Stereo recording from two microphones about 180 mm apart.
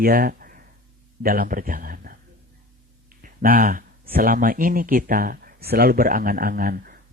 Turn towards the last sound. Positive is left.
turn(degrees=-55)  # may be behind; listen again after turning